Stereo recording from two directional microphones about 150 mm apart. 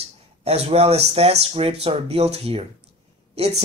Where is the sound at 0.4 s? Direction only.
40° right (ahead or behind).